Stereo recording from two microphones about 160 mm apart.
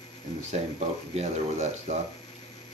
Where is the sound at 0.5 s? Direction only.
45° right (ahead or behind).